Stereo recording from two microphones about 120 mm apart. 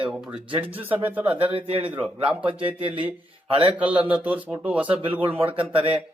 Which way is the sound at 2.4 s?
50° right (ahead or behind).